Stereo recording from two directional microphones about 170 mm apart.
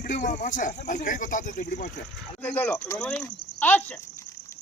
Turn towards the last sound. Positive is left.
turn(degrees=10)  # may be behind; listen again after turning